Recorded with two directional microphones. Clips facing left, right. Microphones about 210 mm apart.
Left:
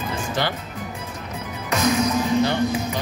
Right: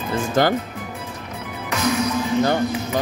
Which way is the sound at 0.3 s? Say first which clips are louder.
Right 8 dB; 45° right (ahead or behind).